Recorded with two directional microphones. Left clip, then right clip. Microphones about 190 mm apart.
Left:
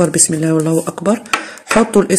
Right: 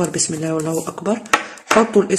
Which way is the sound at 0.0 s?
35° left (ahead or behind).